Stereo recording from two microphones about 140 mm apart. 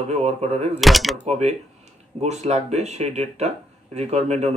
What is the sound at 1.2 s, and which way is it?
Speech, 50° right (ahead or behind).